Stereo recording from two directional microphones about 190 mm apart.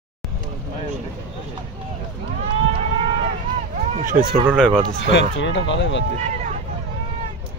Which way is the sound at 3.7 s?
45° right (ahead or behind).